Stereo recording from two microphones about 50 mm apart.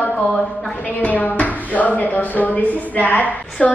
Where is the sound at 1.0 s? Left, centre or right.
Left.